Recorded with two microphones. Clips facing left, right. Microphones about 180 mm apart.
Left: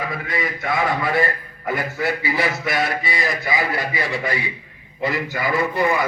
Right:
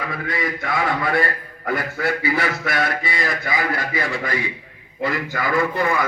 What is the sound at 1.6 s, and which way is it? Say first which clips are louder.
A man's voice: even; 20° left (ahead or behind).